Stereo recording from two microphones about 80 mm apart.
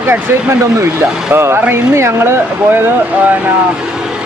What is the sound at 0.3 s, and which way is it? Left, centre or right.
Speech, right.